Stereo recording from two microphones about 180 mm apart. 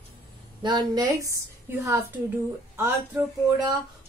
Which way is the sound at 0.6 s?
20° right (ahead or behind).